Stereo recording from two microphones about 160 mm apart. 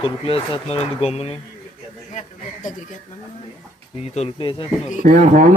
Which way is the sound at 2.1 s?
50° left (ahead or behind).